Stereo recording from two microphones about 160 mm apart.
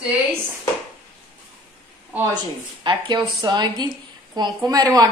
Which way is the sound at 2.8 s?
30° right (ahead or behind).